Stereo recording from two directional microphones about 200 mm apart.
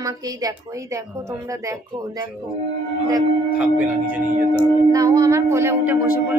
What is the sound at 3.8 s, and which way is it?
A woman's voice, 10° right (ahead or behind).